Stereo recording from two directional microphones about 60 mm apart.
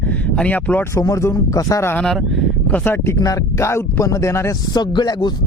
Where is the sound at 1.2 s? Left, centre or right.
Left.